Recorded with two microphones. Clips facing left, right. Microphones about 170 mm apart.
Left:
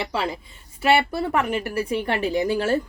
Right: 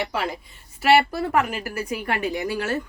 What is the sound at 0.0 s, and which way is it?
Speech, 30° left (ahead or behind).